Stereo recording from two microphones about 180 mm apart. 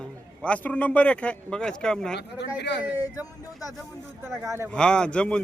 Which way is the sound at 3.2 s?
20° left (ahead or behind).